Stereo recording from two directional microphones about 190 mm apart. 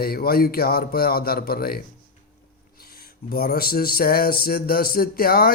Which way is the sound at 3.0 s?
55° left (ahead or behind).